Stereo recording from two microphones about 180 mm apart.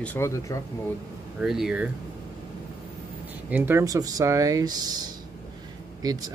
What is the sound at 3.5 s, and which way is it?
Speech, 15° right (ahead or behind).